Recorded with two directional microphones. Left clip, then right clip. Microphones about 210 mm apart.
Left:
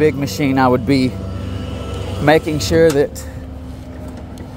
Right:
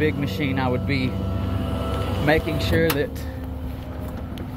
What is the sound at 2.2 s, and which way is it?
Speech, 60° left (ahead or behind).